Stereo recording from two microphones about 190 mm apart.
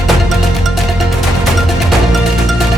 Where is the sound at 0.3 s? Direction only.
Centre (ahead or behind).